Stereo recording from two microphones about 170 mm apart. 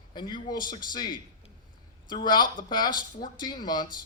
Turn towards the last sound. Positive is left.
turn(degrees=25)  # may be behind; listen again after turning